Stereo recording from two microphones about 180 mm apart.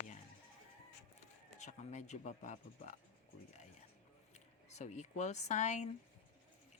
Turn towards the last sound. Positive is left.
turn(degrees=40)  # may be behind; listen again after turning